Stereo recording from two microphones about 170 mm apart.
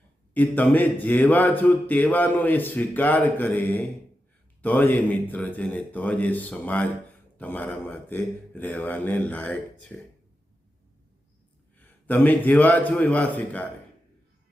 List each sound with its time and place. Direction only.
0.3 s speech: 10° left (ahead or behind)
11.8 s speech: 10° left (ahead or behind)